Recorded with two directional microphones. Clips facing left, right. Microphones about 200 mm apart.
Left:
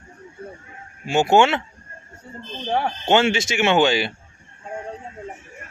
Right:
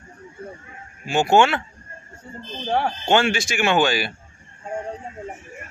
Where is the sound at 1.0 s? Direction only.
20° left (ahead or behind).